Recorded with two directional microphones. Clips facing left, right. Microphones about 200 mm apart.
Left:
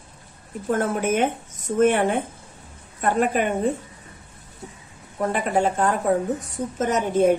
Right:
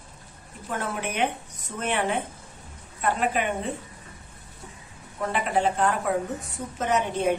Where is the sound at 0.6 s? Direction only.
45° left (ahead or behind).